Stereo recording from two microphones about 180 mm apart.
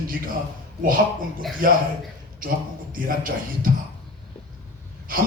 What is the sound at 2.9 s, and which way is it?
Speech, 50° right (ahead or behind).